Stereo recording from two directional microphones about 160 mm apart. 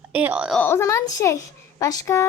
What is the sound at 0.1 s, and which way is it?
Speech, 10° right (ahead or behind).